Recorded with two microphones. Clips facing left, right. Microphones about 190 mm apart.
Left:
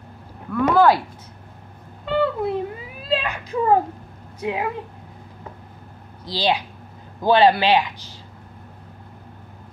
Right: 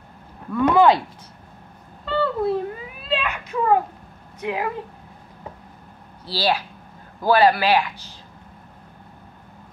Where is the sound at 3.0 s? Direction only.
35° left (ahead or behind).